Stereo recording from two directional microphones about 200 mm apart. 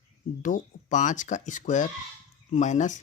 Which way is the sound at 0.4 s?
40° left (ahead or behind).